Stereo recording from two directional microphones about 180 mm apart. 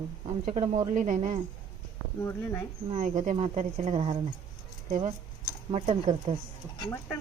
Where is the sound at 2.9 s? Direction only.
45° right (ahead or behind).